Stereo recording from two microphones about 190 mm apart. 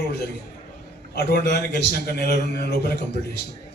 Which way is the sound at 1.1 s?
60° left (ahead or behind).